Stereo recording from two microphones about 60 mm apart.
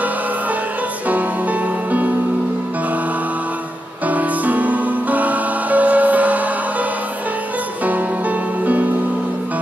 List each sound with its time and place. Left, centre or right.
1.0 s music: right
4.0 s music: right